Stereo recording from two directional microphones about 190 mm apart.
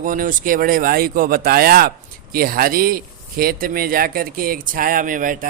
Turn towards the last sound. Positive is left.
turn(degrees=-45)  # may be behind; listen again after turning